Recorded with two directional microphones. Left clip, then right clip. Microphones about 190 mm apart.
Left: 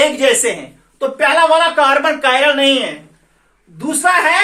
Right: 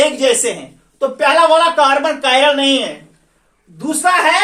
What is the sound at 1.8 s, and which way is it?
Speech, 20° left (ahead or behind).